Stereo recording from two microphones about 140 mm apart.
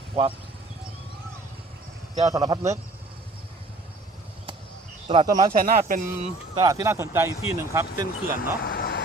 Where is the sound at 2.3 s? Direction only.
25° right (ahead or behind).